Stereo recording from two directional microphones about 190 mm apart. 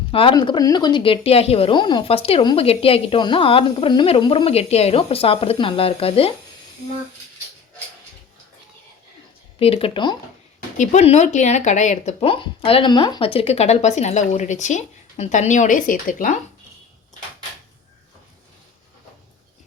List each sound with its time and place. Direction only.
0.1 s speech: 30° left (ahead or behind)
9.6 s speech: 30° left (ahead or behind)
10.8 s speech: 35° left (ahead or behind)